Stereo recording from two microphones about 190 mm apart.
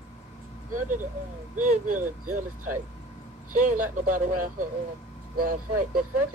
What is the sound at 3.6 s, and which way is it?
Speech, 45° right (ahead or behind).